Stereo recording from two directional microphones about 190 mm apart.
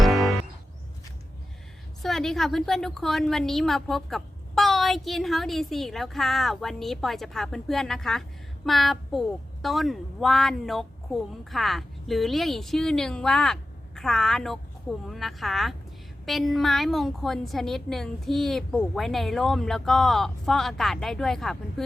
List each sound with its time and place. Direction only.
0.0 s music: centre (ahead or behind)
2.0 s a woman's voice: centre (ahead or behind)